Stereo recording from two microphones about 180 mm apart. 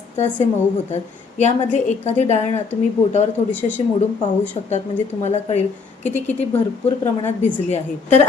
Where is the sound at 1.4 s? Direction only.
40° left (ahead or behind).